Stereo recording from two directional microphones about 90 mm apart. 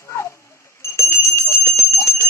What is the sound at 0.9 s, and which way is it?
Jingle bell, 30° left (ahead or behind).